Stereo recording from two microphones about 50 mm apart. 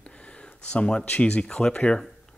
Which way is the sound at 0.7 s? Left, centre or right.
Centre.